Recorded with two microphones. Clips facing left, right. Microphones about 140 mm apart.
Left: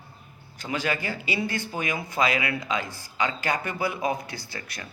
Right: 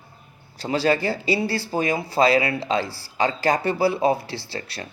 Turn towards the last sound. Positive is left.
turn(degrees=-30)  # may be behind; listen again after turning